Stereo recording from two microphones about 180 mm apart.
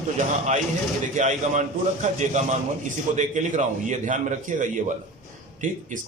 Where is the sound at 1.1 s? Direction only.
40° right (ahead or behind).